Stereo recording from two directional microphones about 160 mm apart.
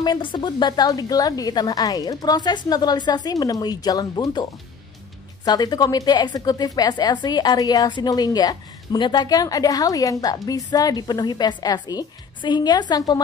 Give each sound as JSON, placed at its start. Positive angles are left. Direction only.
{"t": 0.0, "sound": "a woman's voice", "side_deg": 30}